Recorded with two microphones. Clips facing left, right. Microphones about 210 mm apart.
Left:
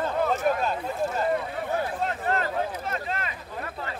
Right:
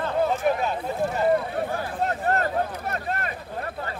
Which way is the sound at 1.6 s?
45° right (ahead or behind).